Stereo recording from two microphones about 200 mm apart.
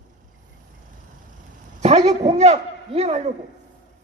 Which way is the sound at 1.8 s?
35° right (ahead or behind).